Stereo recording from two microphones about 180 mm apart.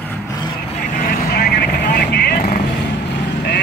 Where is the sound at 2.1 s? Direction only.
65° left (ahead or behind).